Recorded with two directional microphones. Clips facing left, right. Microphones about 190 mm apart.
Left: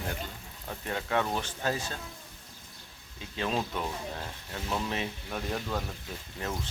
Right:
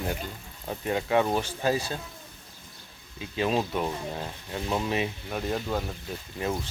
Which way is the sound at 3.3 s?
10° right (ahead or behind).